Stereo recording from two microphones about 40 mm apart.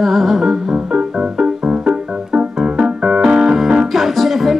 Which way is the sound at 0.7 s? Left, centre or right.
Right.